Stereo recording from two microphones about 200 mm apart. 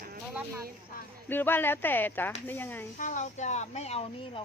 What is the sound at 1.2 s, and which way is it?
Speech, 10° left (ahead or behind).